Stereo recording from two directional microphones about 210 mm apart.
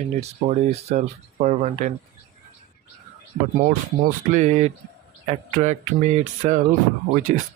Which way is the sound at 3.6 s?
40° right (ahead or behind).